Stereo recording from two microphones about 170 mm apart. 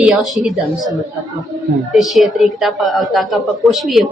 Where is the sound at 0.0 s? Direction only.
Centre (ahead or behind).